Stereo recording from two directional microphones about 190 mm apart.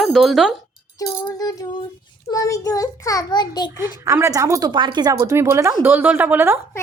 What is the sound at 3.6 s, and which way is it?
Speech, 15° right (ahead or behind).